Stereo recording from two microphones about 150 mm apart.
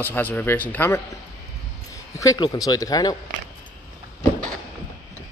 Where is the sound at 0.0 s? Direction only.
15° left (ahead or behind).